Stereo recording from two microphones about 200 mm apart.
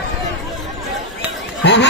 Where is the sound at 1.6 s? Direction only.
60° left (ahead or behind).